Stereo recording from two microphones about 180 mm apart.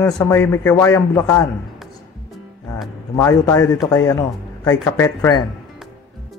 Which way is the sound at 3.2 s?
15° left (ahead or behind).